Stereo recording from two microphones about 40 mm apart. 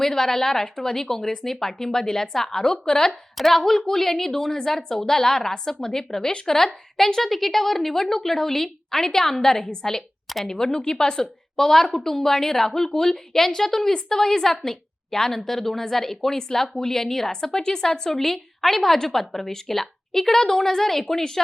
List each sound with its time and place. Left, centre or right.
0.0 s a woman's voice: centre
3.1 s a woman's voice: centre